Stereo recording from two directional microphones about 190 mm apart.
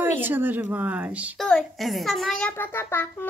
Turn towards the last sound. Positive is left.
turn(degrees=10)  # may be behind; listen again after turning